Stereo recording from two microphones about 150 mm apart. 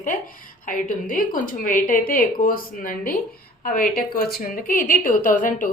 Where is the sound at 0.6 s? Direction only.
65° left (ahead or behind).